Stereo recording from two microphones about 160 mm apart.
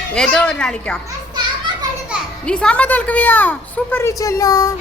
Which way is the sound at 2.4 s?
5° left (ahead or behind).